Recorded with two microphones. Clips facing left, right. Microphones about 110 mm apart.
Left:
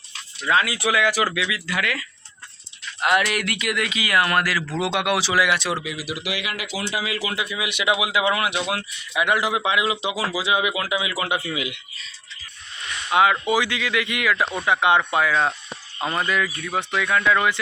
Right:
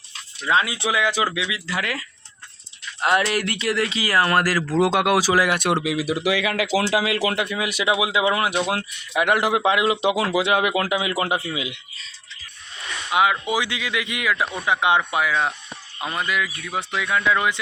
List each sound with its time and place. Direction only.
0.4 s speech: 25° right (ahead or behind); by 6.0 s 75° right (ahead or behind)
6.7 s speech: 90° right; by 11.3 s 45° right (ahead or behind)
11.4 s speech: 25° right (ahead or behind)
13.1 s speech: 15° right (ahead or behind)